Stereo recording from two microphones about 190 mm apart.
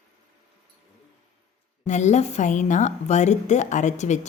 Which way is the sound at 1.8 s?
40° left (ahead or behind).